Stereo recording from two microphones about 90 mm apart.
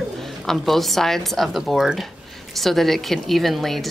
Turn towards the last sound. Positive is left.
turn(degrees=0)  # may be behind; listen again after turning